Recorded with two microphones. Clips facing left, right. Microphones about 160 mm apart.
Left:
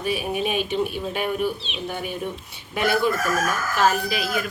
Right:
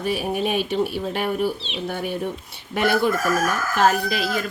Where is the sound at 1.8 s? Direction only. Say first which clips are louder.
Right 3 dB; 50° right (ahead or behind).